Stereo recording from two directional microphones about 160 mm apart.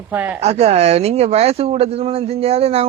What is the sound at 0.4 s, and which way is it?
Speech, 40° right (ahead or behind).